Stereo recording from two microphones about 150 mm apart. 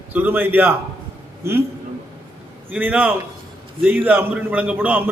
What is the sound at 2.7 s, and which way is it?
A man's voice, 10° right (ahead or behind).